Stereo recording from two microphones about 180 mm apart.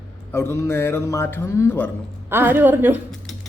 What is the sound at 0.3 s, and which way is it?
A man's voice, 15° left (ahead or behind).